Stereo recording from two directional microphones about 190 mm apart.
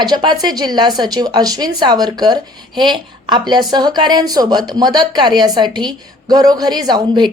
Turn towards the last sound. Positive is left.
turn(degrees=-20)  # may be behind; listen again after turning